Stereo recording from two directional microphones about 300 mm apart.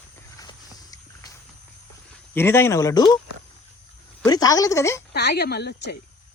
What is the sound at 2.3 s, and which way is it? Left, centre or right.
Speech, centre.